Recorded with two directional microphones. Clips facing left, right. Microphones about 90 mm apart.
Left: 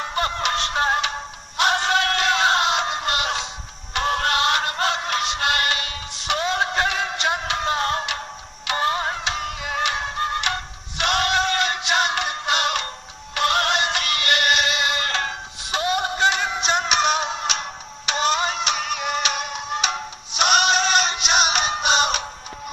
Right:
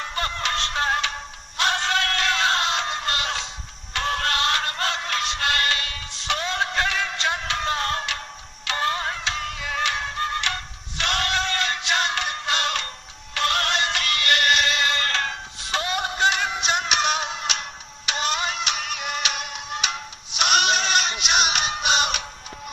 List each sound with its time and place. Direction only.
0.0 s music: 20° left (ahead or behind)
13.3 s synthetic singing: 15° left (ahead or behind); by 22.3 s 30° left (ahead or behind)